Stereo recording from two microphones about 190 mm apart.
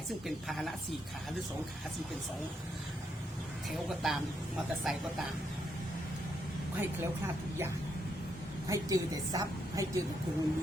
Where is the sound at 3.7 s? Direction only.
Centre (ahead or behind).